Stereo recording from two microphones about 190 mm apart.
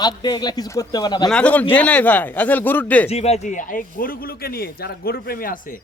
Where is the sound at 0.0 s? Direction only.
20° left (ahead or behind).